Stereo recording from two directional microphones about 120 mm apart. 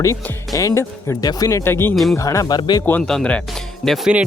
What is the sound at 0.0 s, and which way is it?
Speech, 25° left (ahead or behind).